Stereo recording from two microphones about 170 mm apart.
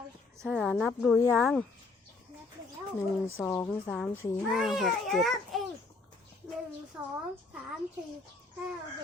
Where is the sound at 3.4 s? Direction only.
15° left (ahead or behind).